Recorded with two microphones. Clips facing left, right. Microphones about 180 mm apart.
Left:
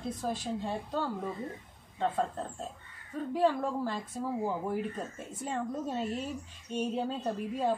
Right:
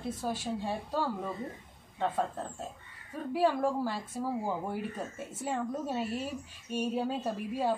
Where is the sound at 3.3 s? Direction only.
10° right (ahead or behind).